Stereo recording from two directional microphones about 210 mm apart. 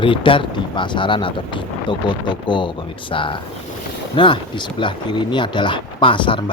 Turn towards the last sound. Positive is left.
turn(degrees=25)  # may be behind; listen again after turning